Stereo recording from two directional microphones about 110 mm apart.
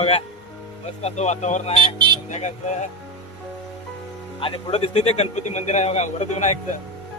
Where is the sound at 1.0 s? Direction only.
85° left.